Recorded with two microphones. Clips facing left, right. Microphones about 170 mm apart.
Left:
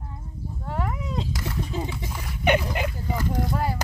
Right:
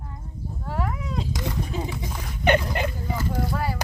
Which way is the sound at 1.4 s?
15° right (ahead or behind).